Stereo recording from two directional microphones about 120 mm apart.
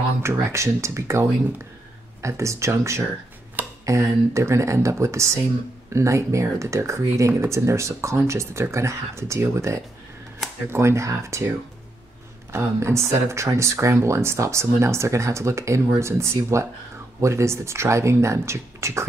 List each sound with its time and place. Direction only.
0.2 s speech: 25° right (ahead or behind)
2.2 s speech: 25° right (ahead or behind)
12.5 s speech: 25° right (ahead or behind)